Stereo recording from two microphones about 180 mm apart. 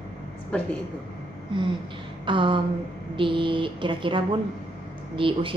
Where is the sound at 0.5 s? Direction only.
5° left (ahead or behind).